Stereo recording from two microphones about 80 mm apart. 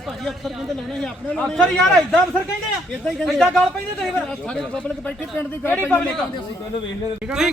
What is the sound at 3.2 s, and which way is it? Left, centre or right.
Speech, centre.